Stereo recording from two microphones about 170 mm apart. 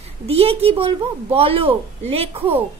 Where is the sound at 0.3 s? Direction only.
35° right (ahead or behind).